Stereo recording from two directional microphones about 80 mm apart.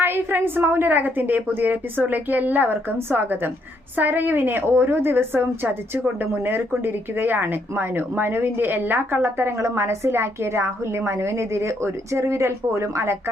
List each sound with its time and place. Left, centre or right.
0.0 s a woman's voice: right